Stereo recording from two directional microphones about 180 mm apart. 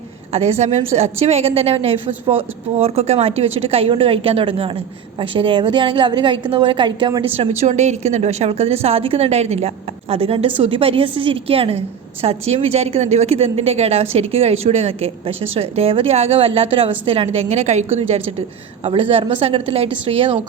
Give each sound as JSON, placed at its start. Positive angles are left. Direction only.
{"t": 0.3, "sound": "a woman's voice", "side_deg": -35}
{"t": 7.3, "sound": "a woman's voice", "side_deg": -35}